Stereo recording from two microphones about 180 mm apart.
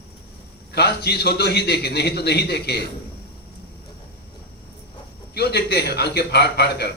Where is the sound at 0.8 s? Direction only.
65° left (ahead or behind).